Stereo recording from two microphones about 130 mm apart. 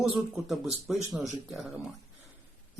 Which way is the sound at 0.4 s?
Centre (ahead or behind).